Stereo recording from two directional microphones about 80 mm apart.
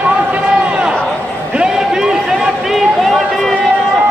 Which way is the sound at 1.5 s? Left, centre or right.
Centre.